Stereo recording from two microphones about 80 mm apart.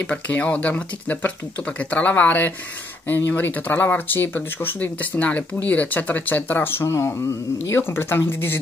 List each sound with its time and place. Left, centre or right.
0.0 s speech: centre
6.9 s speech: left